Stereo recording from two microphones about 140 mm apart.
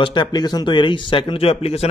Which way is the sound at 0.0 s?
30° left (ahead or behind).